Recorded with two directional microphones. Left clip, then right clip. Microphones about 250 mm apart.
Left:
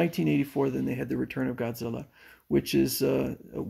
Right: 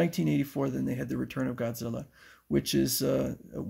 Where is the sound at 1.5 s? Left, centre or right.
Right.